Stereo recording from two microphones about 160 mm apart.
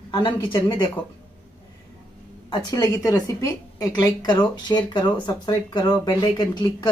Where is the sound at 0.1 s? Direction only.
30° left (ahead or behind).